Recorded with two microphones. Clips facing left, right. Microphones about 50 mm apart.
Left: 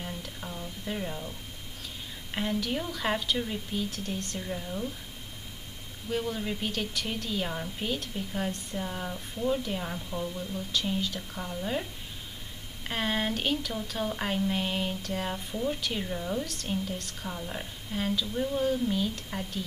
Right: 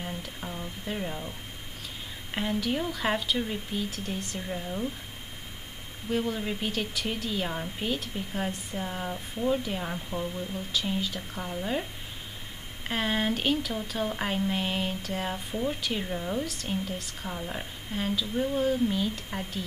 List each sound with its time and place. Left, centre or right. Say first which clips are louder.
0.0 s speech: right 2 dB; centre
2.3 s speech: right 2 dB; centre
6.0 s speech: right 2 dB; centre
12.8 s speech: right 2 dB; centre